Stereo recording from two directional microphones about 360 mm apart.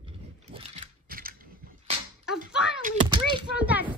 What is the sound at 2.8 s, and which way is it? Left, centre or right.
Speech, centre.